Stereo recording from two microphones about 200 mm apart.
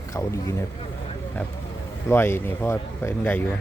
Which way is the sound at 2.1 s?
10° left (ahead or behind).